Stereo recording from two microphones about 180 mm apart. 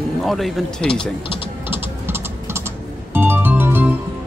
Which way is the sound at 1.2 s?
30° left (ahead or behind).